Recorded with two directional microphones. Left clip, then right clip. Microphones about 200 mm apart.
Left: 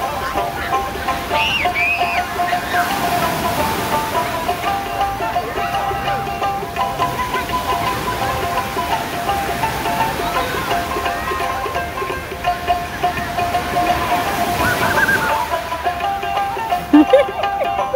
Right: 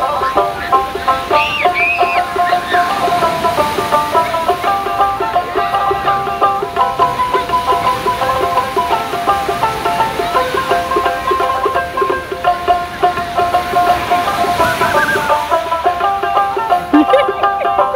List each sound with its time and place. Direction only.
1.3 s music: 20° right (ahead or behind)
16.9 s music: 5° right (ahead or behind)